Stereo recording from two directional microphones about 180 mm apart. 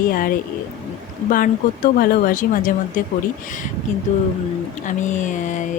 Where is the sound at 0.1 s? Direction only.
50° left (ahead or behind).